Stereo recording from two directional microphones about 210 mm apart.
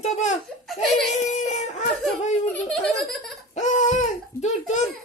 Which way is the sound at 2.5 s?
5° left (ahead or behind).